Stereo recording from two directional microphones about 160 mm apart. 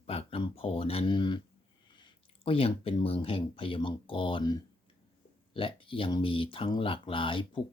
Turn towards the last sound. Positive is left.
turn(degrees=30)  # may be behind; listen again after turning